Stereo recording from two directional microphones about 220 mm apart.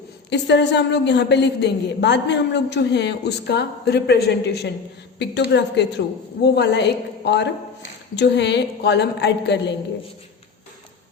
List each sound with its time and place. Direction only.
0.3 s a woman's voice: 50° left (ahead or behind)